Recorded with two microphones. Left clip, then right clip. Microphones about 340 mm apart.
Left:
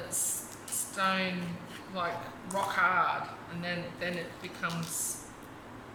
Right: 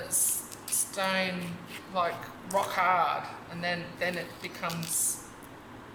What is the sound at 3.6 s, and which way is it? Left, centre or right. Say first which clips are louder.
Speech: right 4 dB; centre.